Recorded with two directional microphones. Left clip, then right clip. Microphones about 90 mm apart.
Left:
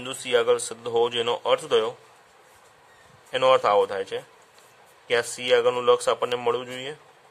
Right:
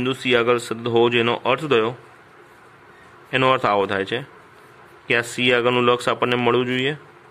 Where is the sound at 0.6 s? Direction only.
25° left (ahead or behind).